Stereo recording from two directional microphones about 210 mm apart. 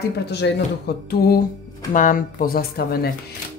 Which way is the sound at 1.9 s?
40° left (ahead or behind).